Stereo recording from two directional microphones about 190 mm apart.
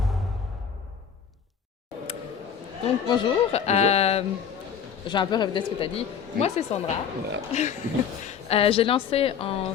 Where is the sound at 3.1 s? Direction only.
30° left (ahead or behind).